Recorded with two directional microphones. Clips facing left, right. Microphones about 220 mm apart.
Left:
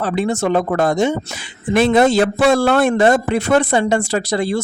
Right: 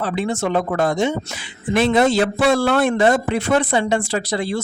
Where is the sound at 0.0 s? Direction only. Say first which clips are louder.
Left 3 dB; 45° left (ahead or behind).